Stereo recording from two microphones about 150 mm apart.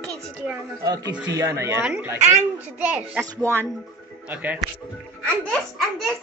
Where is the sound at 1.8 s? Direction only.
10° right (ahead or behind).